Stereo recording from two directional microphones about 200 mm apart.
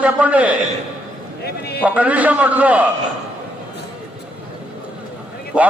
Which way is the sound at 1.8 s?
5° right (ahead or behind).